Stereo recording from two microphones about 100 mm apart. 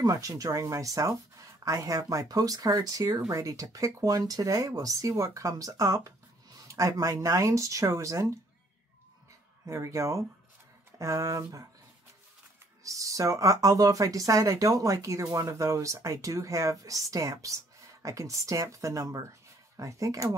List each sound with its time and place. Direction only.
0.0 s speech: 35° right (ahead or behind)
9.7 s speech: 30° right (ahead or behind)
12.8 s speech: 35° right (ahead or behind)